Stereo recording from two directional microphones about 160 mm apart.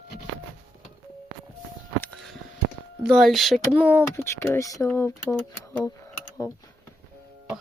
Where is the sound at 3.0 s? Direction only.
Centre (ahead or behind).